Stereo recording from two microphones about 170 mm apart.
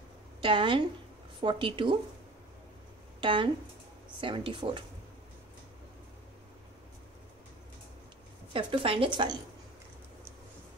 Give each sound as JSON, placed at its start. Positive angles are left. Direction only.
{"t": 0.4, "sound": "a woman's voice", "side_deg": -30}
{"t": 3.2, "sound": "a woman's voice", "side_deg": -30}
{"t": 8.5, "sound": "a woman's voice", "side_deg": -30}